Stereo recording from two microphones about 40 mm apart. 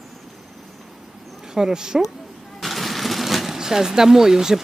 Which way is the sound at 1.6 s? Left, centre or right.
Centre.